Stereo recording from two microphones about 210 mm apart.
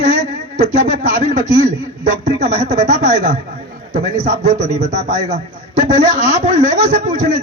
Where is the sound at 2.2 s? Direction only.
30° right (ahead or behind).